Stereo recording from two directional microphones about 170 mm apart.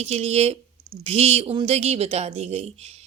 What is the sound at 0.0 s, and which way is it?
A woman's voice, 40° right (ahead or behind).